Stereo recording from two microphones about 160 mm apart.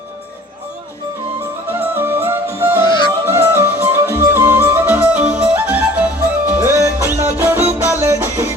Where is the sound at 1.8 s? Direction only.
15° right (ahead or behind).